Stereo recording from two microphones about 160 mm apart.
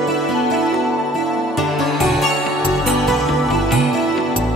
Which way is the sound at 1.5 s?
Centre (ahead or behind).